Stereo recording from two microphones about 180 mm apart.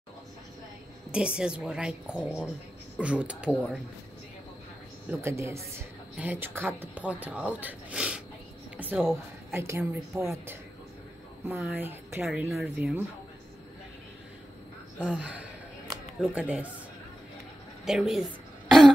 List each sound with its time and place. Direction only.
1.1 s a woman's voice: 5° right (ahead or behind)
5.2 s a woman's voice: 15° right (ahead or behind)
15.0 s speech: 5° right (ahead or behind)
17.8 s a woman's voice: centre (ahead or behind)